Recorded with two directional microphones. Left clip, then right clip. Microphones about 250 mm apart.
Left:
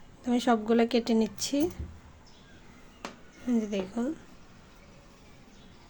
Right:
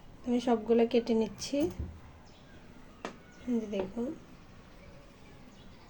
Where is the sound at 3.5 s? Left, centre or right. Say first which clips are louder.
Left 3 dB; left.